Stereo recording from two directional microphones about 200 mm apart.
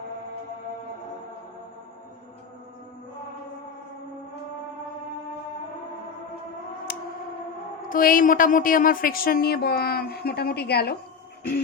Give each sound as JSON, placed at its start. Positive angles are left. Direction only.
{"t": 6.9, "sound": "siren", "side_deg": 50}
{"t": 7.9, "sound": "a woman's voice", "side_deg": 45}